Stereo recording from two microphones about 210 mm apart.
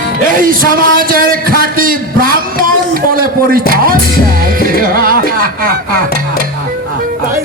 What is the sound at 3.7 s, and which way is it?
Music, 40° right (ahead or behind).